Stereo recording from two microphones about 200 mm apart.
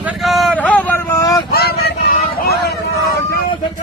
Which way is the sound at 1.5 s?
50° left (ahead or behind).